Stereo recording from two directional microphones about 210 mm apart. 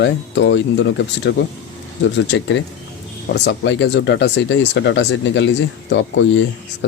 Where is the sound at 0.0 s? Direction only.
55° left (ahead or behind).